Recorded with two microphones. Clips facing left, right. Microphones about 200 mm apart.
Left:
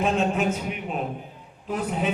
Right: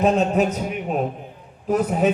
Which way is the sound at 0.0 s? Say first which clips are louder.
Right 5 dB; 40° right (ahead or behind).